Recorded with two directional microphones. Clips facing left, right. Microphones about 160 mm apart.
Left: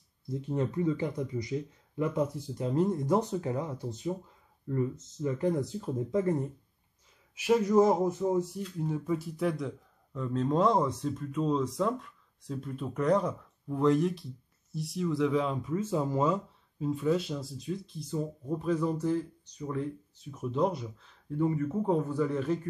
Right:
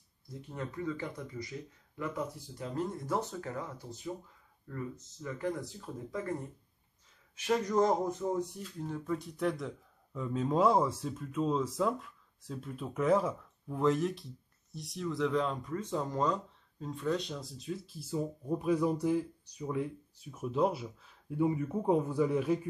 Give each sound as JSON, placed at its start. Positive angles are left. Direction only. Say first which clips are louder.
{"t": 0.5, "sound": "speech", "louder": "left 8 dB", "side_deg": 25}
{"t": 7.3, "sound": "speech", "louder": "left 5 dB", "side_deg": 10}